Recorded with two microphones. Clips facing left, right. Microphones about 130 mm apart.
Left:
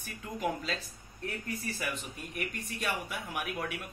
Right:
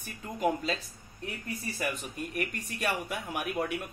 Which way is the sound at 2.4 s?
55° right (ahead or behind).